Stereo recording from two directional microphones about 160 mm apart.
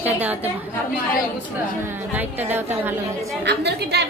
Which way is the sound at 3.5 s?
90° right.